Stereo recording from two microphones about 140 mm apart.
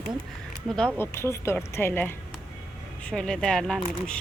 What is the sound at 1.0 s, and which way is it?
Speech, 20° left (ahead or behind).